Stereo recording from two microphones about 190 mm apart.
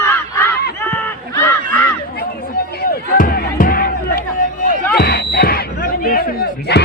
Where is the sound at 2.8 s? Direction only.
50° left (ahead or behind).